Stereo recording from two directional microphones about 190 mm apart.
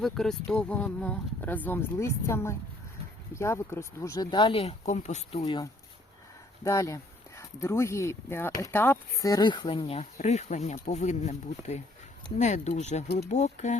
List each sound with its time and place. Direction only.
0.0 s speech: centre (ahead or behind); by 5.6 s 25° left (ahead or behind)
6.7 s speech: 15° left (ahead or behind); by 13.7 s 35° left (ahead or behind)